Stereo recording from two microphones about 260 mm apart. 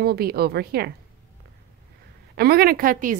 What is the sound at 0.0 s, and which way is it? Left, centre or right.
Speech, right.